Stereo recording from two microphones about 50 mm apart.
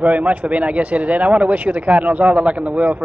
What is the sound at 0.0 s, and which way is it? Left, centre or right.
Speech, right.